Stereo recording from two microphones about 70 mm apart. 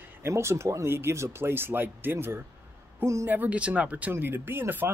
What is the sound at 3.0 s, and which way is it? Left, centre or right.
Speech, right.